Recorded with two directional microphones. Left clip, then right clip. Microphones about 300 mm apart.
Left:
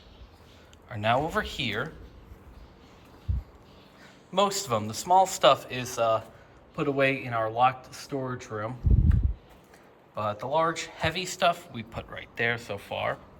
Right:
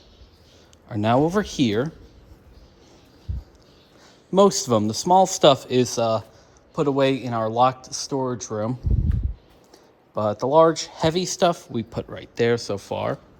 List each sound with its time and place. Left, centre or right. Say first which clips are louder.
0.9 s a man's voice: right 6 dB; centre
4.3 s a man's voice: right 8 dB; centre
6.7 s speech: right 5 dB; centre
10.2 s a man's voice: right 10 dB; centre